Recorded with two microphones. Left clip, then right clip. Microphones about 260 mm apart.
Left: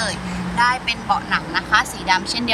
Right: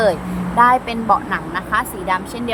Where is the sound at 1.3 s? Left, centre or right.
Centre.